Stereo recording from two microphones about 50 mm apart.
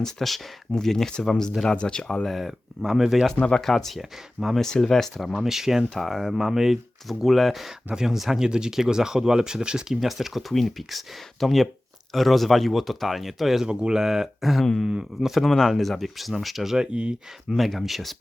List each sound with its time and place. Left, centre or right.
0.0 s speech: centre
2.2 s speech: centre
3.4 s speech: centre
4.6 s speech: centre
5.3 s speech: centre
13.7 s speech: centre
16.7 s speech: centre
17.6 s speech: centre